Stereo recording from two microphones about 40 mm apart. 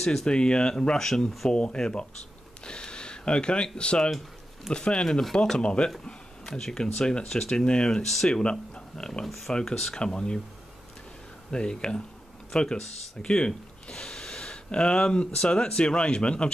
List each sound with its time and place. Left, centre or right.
0.0 s speech: centre
0.3 s speech: left
2.6 s a sound: left
4.7 s speech: centre
8.0 s speech: centre
8.3 s speech: left
11.5 s speech: left